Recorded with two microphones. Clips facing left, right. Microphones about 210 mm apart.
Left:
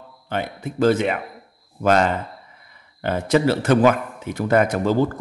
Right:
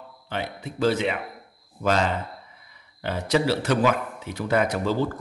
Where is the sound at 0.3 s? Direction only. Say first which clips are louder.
Left 5 dB; 50° left (ahead or behind).